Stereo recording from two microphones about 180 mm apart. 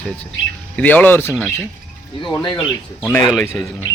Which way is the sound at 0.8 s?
10° left (ahead or behind).